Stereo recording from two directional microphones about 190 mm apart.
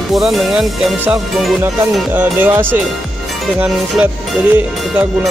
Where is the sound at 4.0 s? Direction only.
5° right (ahead or behind).